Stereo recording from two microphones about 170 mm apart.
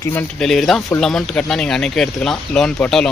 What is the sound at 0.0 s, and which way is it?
Speech, 10° left (ahead or behind).